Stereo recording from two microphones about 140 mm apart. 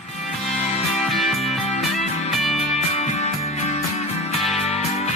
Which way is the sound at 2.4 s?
50° left (ahead or behind).